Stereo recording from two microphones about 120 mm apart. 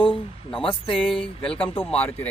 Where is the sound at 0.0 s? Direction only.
45° left (ahead or behind).